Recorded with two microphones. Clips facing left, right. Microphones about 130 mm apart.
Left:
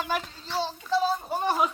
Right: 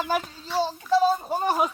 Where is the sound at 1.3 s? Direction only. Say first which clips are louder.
Right 2 dB; 15° right (ahead or behind).